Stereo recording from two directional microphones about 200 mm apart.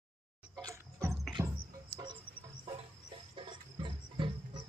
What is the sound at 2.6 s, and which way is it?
Chicken, 25° right (ahead or behind).